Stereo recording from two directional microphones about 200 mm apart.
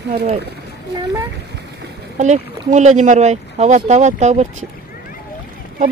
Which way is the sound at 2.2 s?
35° right (ahead or behind).